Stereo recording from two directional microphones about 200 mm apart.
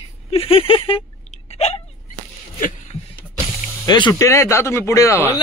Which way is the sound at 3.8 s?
20° left (ahead or behind).